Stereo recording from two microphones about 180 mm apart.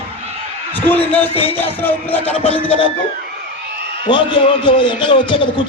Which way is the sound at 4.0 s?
25° left (ahead or behind).